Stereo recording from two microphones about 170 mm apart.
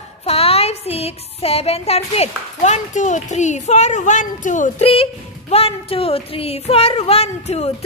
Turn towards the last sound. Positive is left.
turn(degrees=40)  # may be behind; listen again after turning